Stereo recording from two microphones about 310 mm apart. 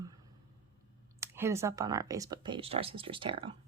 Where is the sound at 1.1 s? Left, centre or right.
Centre.